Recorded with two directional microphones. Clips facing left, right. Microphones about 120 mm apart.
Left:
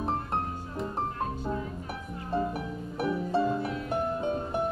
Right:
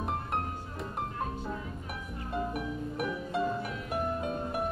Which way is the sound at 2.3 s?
30° left (ahead or behind).